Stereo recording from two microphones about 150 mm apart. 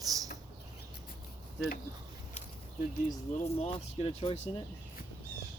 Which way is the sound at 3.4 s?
45° left (ahead or behind).